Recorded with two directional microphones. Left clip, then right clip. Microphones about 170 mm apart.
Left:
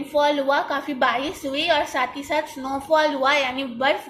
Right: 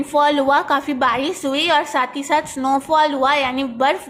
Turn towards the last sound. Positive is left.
turn(degrees=-40)  # may be behind; listen again after turning